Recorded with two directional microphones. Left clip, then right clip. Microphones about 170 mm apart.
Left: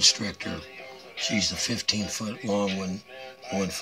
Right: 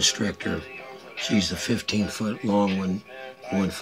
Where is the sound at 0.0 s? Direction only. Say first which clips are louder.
Left 1 dB; centre (ahead or behind).